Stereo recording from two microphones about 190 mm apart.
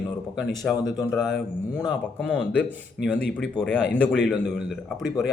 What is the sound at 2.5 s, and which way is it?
Speech, 5° left (ahead or behind).